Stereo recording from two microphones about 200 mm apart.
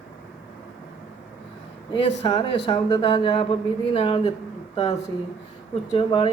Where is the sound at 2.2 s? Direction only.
25° left (ahead or behind).